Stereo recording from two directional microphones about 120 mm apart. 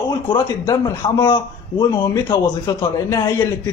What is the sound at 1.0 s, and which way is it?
Speech, 45° left (ahead or behind).